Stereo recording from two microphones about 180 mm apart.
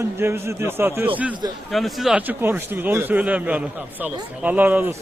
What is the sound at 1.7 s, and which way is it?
Speech, centre (ahead or behind).